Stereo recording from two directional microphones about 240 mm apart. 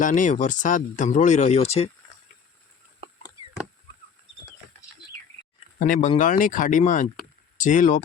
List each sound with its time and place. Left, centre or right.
0.0 s speech: left
5.8 s speech: left